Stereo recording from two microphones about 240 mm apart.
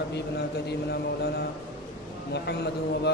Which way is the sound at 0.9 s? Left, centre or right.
Left.